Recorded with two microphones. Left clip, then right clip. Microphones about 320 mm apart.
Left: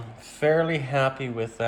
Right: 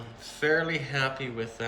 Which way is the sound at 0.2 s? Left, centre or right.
Centre.